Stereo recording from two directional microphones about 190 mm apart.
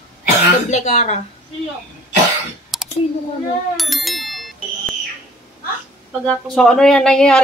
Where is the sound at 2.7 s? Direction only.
Centre (ahead or behind).